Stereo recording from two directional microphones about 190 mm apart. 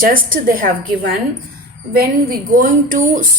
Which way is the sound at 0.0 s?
45° right (ahead or behind).